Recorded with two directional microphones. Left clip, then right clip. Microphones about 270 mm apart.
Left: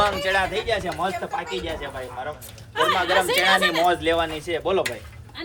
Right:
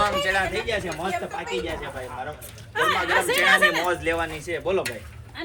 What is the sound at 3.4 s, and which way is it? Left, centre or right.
Speech, left.